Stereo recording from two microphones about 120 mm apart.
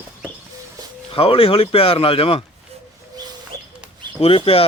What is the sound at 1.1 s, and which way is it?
Speech, 50° left (ahead or behind).